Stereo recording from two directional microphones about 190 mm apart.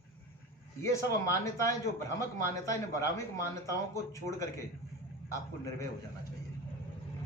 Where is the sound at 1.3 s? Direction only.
15° left (ahead or behind).